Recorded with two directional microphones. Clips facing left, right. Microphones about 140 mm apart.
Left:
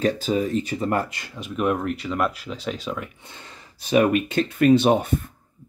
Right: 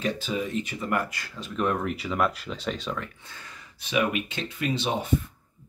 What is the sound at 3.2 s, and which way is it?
Speech, 20° left (ahead or behind).